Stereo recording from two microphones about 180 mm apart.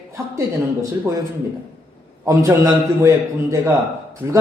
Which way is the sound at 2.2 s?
15° right (ahead or behind).